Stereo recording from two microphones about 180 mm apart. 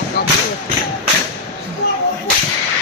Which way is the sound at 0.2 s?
60° left (ahead or behind).